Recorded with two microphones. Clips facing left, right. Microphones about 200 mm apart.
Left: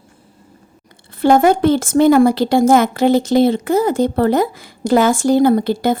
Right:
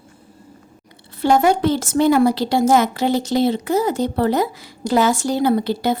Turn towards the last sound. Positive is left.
turn(degrees=50)  # may be behind; listen again after turning